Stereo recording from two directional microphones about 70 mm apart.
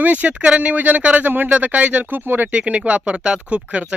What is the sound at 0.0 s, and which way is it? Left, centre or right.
Speech, right.